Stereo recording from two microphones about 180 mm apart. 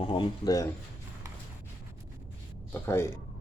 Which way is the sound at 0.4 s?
20° left (ahead or behind).